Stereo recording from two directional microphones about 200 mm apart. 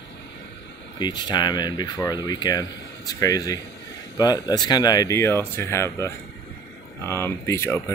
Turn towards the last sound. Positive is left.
turn(degrees=15)  # may be behind; listen again after turning